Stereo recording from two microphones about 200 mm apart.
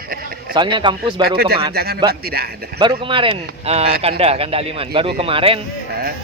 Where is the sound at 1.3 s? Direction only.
50° right (ahead or behind).